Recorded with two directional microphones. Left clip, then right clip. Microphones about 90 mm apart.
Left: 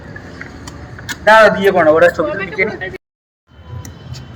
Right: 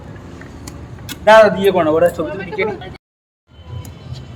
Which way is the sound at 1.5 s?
10° right (ahead or behind).